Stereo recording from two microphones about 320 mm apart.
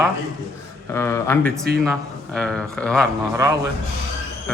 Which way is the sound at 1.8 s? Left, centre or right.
Centre.